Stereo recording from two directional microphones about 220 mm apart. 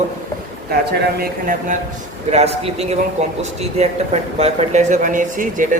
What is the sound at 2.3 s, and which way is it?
A man's voice, 30° right (ahead or behind).